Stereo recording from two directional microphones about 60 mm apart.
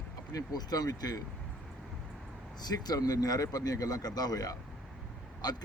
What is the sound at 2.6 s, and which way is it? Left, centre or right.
Speech, left.